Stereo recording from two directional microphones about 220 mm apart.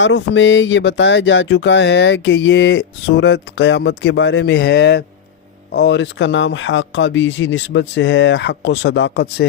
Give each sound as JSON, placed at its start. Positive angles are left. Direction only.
{"t": 0.0, "sound": "speech", "side_deg": 55}